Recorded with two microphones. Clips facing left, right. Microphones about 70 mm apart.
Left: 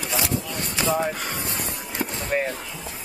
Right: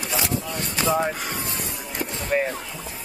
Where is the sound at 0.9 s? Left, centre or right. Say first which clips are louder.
Right 1 dB; centre.